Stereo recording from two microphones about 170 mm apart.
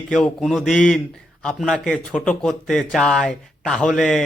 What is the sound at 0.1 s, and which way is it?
A man's voice, centre (ahead or behind).